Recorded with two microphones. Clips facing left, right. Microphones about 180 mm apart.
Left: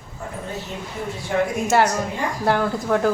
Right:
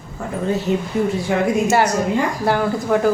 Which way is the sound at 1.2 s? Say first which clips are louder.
Left 1 dB; 90° right.